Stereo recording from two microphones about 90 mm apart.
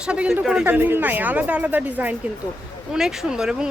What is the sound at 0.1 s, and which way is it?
Speech, 10° right (ahead or behind).